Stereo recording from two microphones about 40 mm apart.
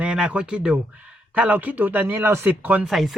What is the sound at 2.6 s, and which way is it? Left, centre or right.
Speech, right.